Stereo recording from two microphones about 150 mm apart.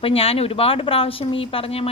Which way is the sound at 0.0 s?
40° left (ahead or behind).